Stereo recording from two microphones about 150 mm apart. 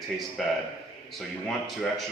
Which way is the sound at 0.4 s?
Centre (ahead or behind).